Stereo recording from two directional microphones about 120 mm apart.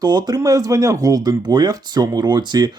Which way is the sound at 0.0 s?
35° right (ahead or behind).